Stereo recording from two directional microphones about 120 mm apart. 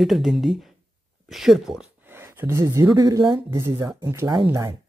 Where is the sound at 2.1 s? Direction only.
20° right (ahead or behind).